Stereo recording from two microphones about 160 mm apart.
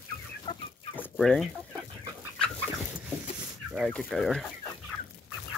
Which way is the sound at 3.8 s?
5° left (ahead or behind).